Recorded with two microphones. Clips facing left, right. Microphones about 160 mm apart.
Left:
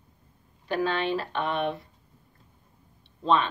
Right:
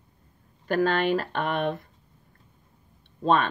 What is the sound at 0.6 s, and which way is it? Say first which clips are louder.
Speech: right 4 dB; 50° right (ahead or behind).